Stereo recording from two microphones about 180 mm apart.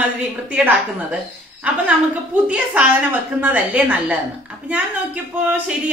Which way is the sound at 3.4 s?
10° right (ahead or behind).